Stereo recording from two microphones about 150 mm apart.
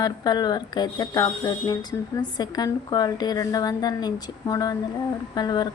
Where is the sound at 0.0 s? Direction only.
30° left (ahead or behind).